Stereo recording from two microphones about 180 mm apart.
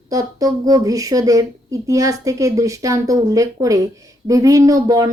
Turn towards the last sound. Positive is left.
turn(degrees=-20)  # may be behind; listen again after turning